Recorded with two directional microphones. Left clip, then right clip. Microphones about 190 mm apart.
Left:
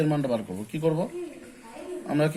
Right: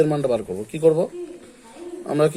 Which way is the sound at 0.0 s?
45° right (ahead or behind).